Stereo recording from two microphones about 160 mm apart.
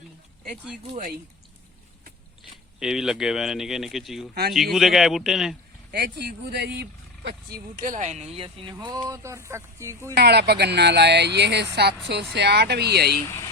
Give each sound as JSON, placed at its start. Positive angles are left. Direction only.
{"t": 2.8, "sound": "speech", "side_deg": -5}
{"t": 5.9, "sound": "speech", "side_deg": -85}
{"t": 7.3, "sound": "speech", "side_deg": -65}
{"t": 10.2, "sound": "speech", "side_deg": -90}
{"t": 13.2, "sound": "speech", "side_deg": 20}